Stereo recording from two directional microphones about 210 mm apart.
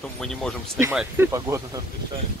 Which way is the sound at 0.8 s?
10° right (ahead or behind).